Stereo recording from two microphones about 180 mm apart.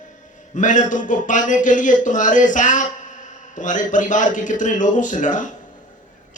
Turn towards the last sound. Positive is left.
turn(degrees=45)  # may be behind; listen again after turning